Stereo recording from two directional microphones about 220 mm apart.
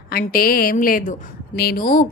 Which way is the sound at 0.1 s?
45° left (ahead or behind).